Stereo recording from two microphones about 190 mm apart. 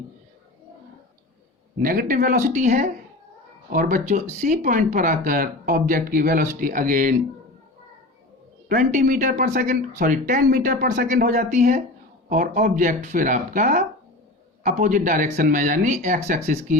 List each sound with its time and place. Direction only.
1.8 s speech: 50° right (ahead or behind)
8.7 s speech: 45° right (ahead or behind)